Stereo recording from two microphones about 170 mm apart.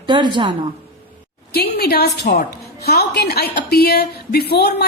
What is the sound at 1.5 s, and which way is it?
A woman's voice, 70° left (ahead or behind).